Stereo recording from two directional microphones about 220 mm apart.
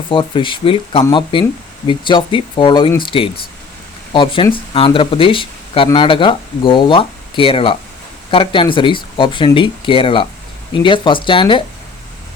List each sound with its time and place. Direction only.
0.1 s speech: 25° left (ahead or behind)